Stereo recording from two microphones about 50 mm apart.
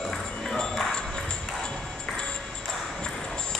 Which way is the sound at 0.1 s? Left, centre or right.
Centre.